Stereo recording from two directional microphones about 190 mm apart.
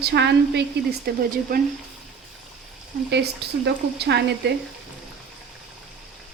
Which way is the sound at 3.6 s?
60° right (ahead or behind).